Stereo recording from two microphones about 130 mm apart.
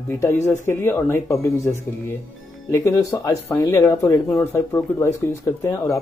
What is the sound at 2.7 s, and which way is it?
Speech, 25° left (ahead or behind).